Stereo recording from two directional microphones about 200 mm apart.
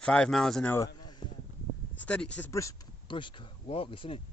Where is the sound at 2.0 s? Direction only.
5° left (ahead or behind).